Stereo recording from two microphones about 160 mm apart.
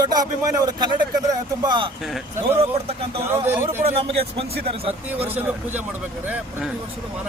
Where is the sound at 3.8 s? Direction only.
35° right (ahead or behind).